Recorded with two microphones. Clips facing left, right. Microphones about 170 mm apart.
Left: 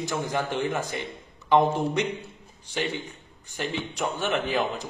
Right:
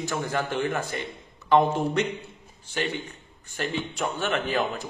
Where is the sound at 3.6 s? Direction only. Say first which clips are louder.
Right 1 dB; 15° left (ahead or behind).